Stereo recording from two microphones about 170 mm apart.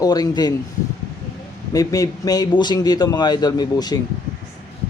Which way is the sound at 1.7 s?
20° left (ahead or behind).